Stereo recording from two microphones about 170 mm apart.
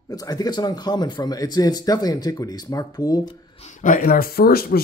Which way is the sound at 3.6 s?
45° left (ahead or behind).